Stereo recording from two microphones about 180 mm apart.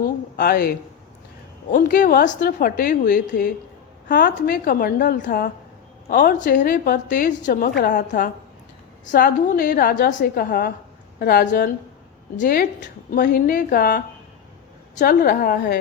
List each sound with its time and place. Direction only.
0.3 s a woman's voice: 55° left (ahead or behind)